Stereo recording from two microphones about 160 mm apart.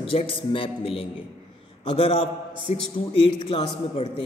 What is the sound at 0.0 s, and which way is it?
A man's voice, 35° left (ahead or behind).